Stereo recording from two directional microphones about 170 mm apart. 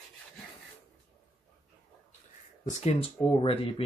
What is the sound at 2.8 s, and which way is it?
Speech, 35° left (ahead or behind).